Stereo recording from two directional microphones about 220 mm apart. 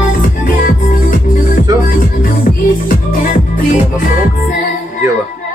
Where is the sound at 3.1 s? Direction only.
35° left (ahead or behind).